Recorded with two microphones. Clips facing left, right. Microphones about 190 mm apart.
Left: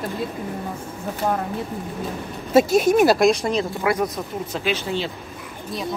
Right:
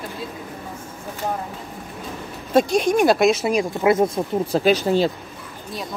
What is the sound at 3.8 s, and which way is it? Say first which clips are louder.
Speech: right 5 dB; 25° right (ahead or behind).